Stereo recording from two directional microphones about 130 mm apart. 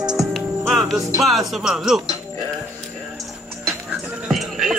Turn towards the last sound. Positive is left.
turn(degrees=0)  # may be behind; listen again after turning